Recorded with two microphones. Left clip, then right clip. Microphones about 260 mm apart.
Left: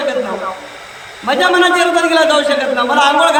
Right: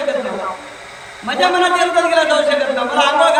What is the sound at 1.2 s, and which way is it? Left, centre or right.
A man's voice, centre.